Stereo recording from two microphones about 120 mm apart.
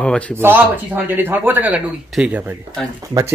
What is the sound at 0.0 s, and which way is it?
Speech, 5° left (ahead or behind).